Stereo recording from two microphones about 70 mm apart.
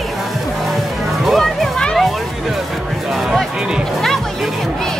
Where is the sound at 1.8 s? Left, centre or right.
Centre.